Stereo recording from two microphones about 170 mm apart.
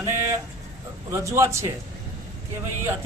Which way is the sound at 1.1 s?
15° right (ahead or behind).